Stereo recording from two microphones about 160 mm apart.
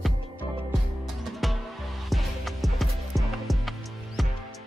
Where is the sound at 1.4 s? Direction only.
Centre (ahead or behind).